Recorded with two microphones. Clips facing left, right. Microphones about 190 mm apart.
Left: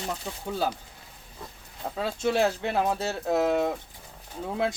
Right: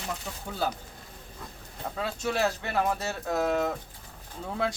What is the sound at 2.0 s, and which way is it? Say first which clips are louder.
Speech: left 4 dB; 30° left (ahead or behind).